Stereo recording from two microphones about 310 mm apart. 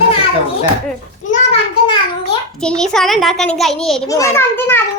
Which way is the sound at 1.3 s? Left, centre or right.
Centre.